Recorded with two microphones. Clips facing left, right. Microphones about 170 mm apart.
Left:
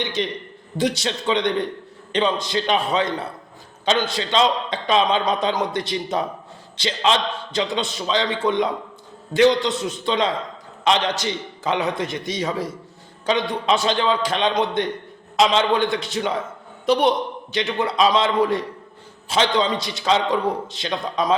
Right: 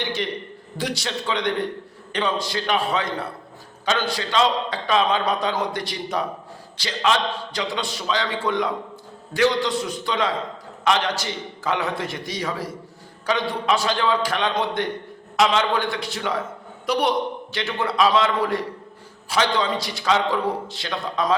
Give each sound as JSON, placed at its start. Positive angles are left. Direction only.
{"t": 0.0, "sound": "a man's voice", "side_deg": 20}